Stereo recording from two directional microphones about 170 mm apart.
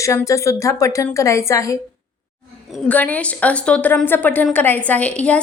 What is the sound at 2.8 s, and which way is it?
A woman's voice, 10° left (ahead or behind).